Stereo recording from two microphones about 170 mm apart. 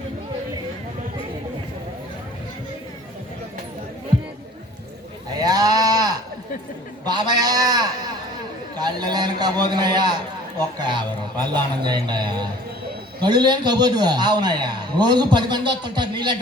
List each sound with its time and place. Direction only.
5.4 s sheep: 20° right (ahead or behind)
7.0 s a man's voice: 25° right (ahead or behind)